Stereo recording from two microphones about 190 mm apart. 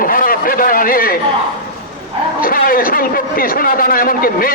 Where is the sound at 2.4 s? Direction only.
50° left (ahead or behind).